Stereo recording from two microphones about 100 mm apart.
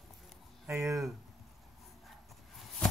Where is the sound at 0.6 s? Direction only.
30° right (ahead or behind).